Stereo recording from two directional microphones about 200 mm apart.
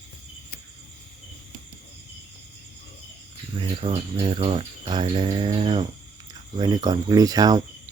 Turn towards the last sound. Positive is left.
turn(degrees=-20)  # may be behind; listen again after turning